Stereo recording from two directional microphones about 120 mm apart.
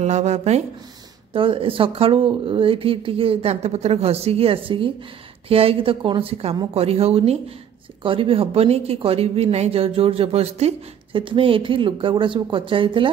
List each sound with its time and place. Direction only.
0.0 s speech: 70° right (ahead or behind)
1.3 s speech: 45° right (ahead or behind)
11.1 s speech: 45° right (ahead or behind)